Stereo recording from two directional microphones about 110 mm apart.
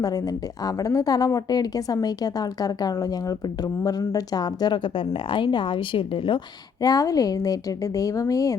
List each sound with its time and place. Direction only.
0.0 s a woman's voice: 35° left (ahead or behind); by 6.4 s 50° left (ahead or behind)
6.8 s a woman's voice: 35° left (ahead or behind)